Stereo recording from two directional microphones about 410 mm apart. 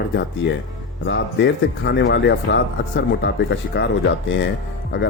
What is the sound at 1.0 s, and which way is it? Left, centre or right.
Speech, left.